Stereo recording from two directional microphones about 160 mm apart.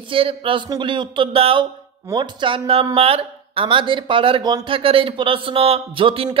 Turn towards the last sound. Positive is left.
turn(degrees=-35)  # may be behind; listen again after turning